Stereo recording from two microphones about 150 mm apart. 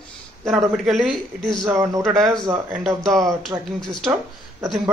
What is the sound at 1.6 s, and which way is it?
Speech, 20° right (ahead or behind).